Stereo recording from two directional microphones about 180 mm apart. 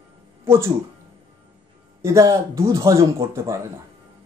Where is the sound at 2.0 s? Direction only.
15° right (ahead or behind).